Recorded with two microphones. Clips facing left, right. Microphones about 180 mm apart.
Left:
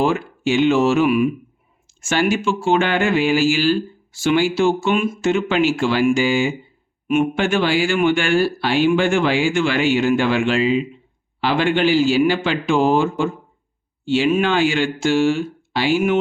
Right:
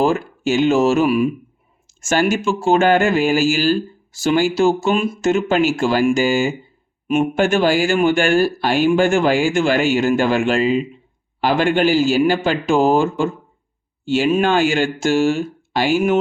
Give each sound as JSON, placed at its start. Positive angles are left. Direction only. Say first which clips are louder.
{"t": 0.0, "sound": "speech", "louder": "right 2 dB", "side_deg": -40}
{"t": 14.1, "sound": "speech", "louder": "right 1 dB", "side_deg": -40}